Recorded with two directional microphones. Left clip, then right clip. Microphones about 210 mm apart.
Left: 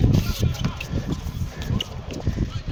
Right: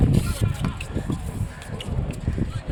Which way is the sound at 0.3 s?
5° left (ahead or behind).